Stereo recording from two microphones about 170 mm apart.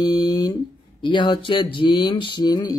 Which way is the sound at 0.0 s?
25° left (ahead or behind).